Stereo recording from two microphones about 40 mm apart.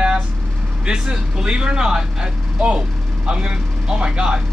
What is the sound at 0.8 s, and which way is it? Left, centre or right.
Speech, right.